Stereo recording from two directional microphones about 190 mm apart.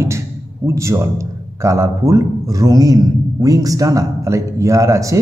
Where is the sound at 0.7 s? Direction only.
15° right (ahead or behind).